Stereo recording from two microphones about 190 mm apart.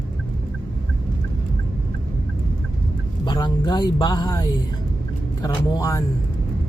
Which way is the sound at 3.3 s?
20° left (ahead or behind).